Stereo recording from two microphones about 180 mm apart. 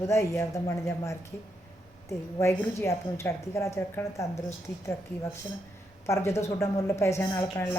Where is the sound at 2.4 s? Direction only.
15° left (ahead or behind).